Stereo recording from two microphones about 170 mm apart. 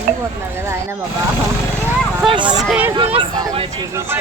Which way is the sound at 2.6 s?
10° right (ahead or behind).